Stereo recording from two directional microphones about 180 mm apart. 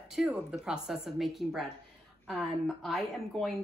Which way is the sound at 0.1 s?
5° right (ahead or behind).